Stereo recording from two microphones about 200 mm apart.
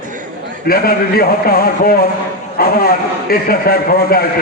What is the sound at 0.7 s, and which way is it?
A man's voice, 50° left (ahead or behind).